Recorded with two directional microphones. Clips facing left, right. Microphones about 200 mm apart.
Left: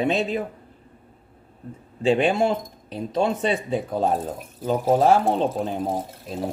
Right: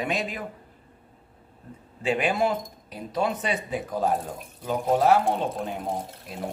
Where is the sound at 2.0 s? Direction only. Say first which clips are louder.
Left 5 dB; 25° left (ahead or behind).